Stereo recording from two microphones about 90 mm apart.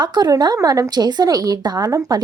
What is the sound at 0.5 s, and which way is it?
Speech, 40° right (ahead or behind).